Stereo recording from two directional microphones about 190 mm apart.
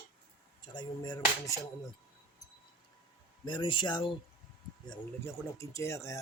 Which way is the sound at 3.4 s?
25° left (ahead or behind).